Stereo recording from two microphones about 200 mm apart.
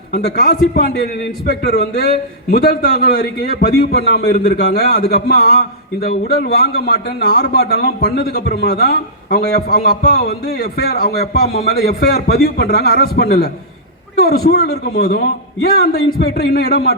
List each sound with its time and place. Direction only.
0.3 s a man's voice: 50° left (ahead or behind)